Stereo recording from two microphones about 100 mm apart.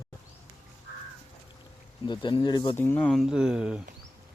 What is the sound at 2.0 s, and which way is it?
Speech, 50° left (ahead or behind).